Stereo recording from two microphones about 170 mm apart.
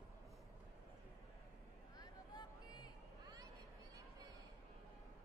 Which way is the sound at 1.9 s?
25° left (ahead or behind).